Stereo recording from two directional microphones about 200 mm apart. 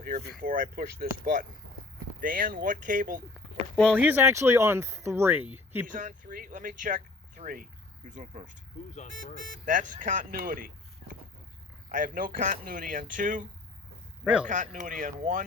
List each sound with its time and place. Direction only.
0.3 s speech: 45° right (ahead or behind)
3.9 s speech: 10° right (ahead or behind)
5.9 s speech: 40° right (ahead or behind)
11.9 s speech: 45° right (ahead or behind)
14.4 s speech: 40° right (ahead or behind)